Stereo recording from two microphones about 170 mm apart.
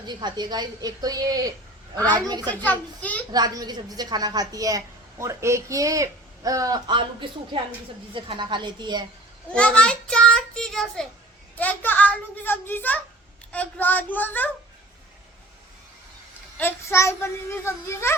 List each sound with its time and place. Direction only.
0.0 s a woman's voice: 25° right (ahead or behind)
2.6 s a child's voice: 10° left (ahead or behind)
3.3 s a woman's voice: 20° right (ahead or behind)
9.5 s a child's voice: 5° left (ahead or behind)
16.6 s a child's voice: 15° left (ahead or behind)